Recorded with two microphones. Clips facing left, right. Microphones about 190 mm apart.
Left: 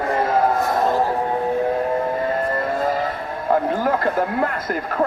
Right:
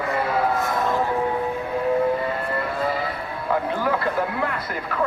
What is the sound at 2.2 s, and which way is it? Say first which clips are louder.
A man's voice: left 4 dB; 45° left (ahead or behind).